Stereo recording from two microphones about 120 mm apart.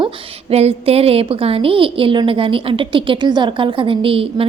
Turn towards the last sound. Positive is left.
turn(degrees=-50)  # may be behind; listen again after turning